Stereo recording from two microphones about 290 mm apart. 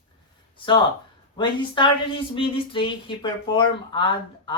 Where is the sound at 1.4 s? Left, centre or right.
Centre.